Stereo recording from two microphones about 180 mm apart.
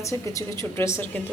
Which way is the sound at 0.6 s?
15° left (ahead or behind).